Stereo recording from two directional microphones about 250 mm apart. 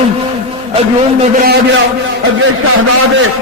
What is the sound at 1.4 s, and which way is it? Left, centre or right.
Speech, right.